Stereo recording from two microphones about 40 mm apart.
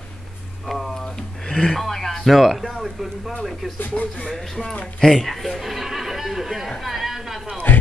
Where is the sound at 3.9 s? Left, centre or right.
Left.